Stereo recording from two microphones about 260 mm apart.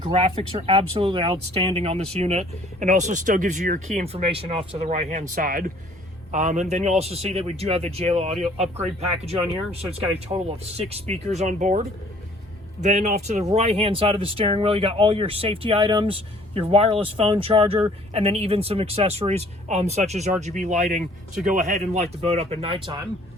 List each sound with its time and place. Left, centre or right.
0.0 s speech: right
10.2 s speech: right